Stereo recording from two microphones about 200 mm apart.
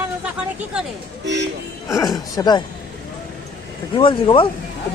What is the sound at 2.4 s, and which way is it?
Speech, 20° left (ahead or behind).